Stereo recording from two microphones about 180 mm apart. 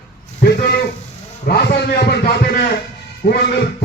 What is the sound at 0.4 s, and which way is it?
A man's voice, 60° left (ahead or behind).